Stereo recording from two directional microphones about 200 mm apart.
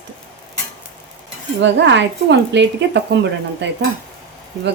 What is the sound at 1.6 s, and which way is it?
Speech, 60° right (ahead or behind).